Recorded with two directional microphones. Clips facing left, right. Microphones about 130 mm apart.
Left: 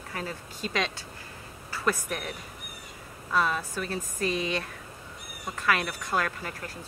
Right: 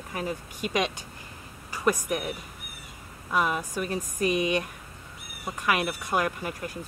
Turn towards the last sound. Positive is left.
turn(degrees=-15)  # may be behind; listen again after turning